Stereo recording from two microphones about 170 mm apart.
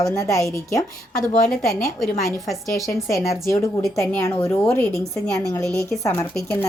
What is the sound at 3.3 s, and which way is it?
A woman's voice, 20° left (ahead or behind).